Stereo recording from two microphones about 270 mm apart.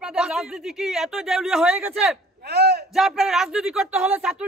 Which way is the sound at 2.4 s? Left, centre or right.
Right.